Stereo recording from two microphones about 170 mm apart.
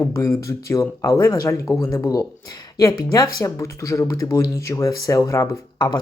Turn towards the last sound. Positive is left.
turn(degrees=20)  # may be behind; listen again after turning